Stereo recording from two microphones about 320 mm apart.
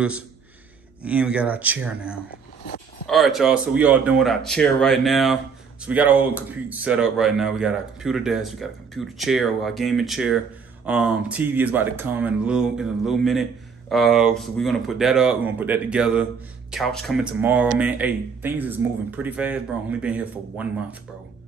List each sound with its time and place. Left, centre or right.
1.0 s speech: centre